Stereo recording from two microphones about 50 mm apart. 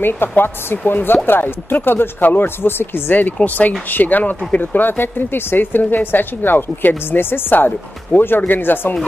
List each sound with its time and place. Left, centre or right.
0.0 s speech: left